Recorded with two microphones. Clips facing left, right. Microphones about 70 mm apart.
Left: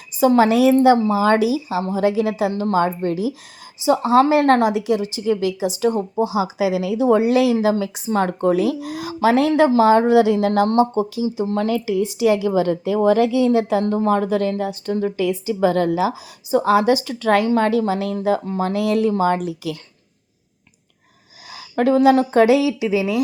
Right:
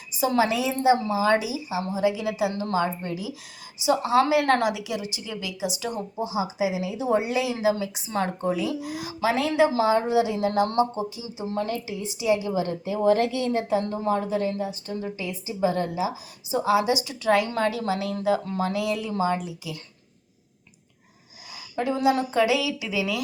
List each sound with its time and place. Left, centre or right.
0.1 s a woman's voice: left
3.8 s a woman's voice: left
6.1 s a woman's voice: left
8.4 s a woman's voice: left
11.5 s a woman's voice: left
13.9 s a woman's voice: left
16.5 s a woman's voice: left
21.5 s a woman's voice: left